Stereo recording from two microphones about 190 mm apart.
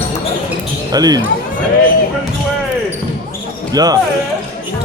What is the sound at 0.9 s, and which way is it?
Speech, 20° right (ahead or behind).